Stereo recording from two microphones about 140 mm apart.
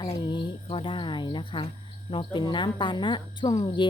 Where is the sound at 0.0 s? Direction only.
35° left (ahead or behind).